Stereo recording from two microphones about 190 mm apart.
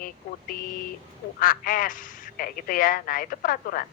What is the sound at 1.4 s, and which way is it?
A woman's voice, 45° left (ahead or behind).